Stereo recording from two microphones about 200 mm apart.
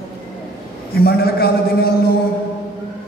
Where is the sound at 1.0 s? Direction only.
50° left (ahead or behind).